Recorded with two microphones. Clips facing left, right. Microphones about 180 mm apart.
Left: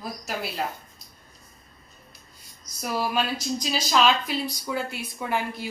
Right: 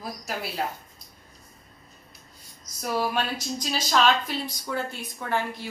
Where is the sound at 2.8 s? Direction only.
Centre (ahead or behind).